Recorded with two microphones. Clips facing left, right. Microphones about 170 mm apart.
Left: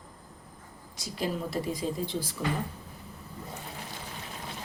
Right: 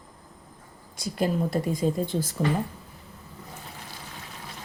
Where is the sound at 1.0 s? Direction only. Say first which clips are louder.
Right 6 dB; 50° right (ahead or behind).